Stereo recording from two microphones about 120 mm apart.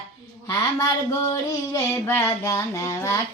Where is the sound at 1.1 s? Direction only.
25° left (ahead or behind).